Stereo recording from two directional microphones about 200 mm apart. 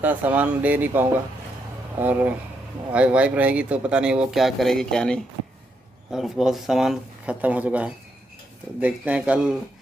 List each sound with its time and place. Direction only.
0.0 s speech: 10° right (ahead or behind)